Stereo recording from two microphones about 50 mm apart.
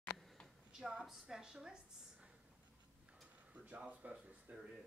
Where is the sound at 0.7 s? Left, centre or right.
Centre.